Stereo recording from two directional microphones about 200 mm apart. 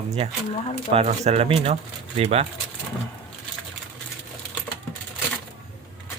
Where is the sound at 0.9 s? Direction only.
35° right (ahead or behind).